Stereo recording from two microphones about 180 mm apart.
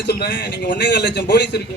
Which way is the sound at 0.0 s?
65° left (ahead or behind).